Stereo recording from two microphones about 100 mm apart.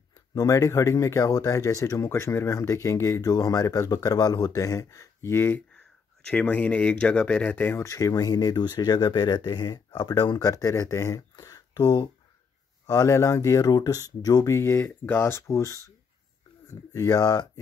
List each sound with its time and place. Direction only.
0.3 s speech: 35° left (ahead or behind)
5.7 s speech: 10° left (ahead or behind); by 12.1 s 40° left (ahead or behind)
12.8 s speech: 30° left (ahead or behind)
16.9 s speech: 35° left (ahead or behind)